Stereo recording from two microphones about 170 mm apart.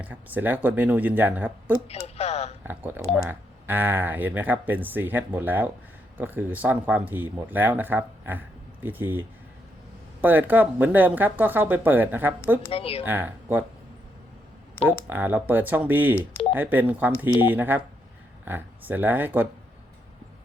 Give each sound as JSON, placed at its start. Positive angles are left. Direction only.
{"t": 0.0, "sound": "speech", "side_deg": -10}
{"t": 1.9, "sound": "a sound", "side_deg": 40}
{"t": 2.6, "sound": "speech", "side_deg": -10}
{"t": 12.7, "sound": "speech", "side_deg": 35}
{"t": 13.0, "sound": "speech", "side_deg": -10}
{"t": 14.8, "sound": "speech", "side_deg": 15}
{"t": 15.1, "sound": "speech", "side_deg": -10}